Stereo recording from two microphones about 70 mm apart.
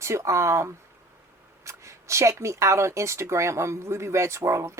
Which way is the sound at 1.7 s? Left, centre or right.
Right.